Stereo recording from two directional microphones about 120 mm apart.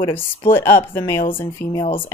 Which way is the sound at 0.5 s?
20° left (ahead or behind).